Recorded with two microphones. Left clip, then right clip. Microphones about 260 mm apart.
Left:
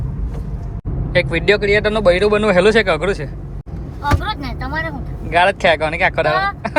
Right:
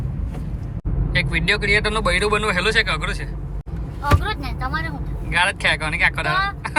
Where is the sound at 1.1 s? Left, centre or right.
Left.